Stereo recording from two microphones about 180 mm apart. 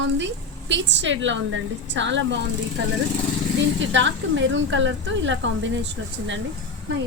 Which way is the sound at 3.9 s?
90° right.